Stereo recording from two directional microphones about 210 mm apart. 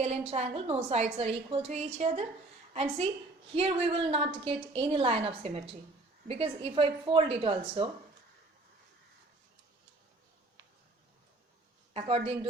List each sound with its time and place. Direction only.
0.0 s a woman's voice: 30° right (ahead or behind)
11.9 s a woman's voice: 30° right (ahead or behind)